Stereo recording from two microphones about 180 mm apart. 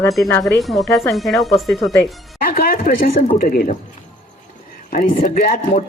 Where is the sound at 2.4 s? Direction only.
55° left (ahead or behind).